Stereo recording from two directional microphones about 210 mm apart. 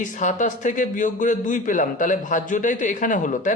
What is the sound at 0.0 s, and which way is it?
A man's voice, 35° left (ahead or behind).